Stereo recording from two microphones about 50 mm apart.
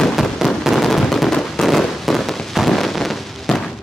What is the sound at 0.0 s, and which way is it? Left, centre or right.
Fireworks, centre.